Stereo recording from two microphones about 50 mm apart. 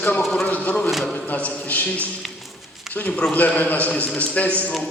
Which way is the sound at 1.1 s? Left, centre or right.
Left.